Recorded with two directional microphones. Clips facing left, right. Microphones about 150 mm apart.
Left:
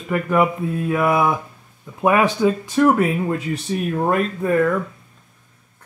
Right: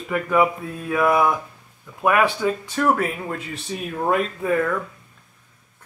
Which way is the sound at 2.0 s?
20° left (ahead or behind).